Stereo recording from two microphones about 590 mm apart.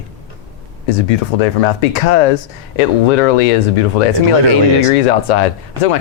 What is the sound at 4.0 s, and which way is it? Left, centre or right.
Speech, left.